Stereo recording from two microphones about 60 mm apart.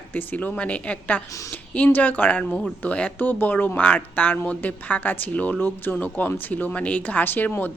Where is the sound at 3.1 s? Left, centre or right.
Left.